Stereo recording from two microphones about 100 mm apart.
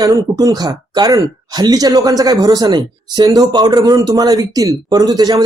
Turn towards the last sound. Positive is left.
turn(degrees=-45)  # may be behind; listen again after turning